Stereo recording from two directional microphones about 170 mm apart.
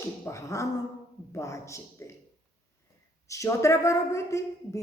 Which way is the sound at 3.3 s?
15° left (ahead or behind).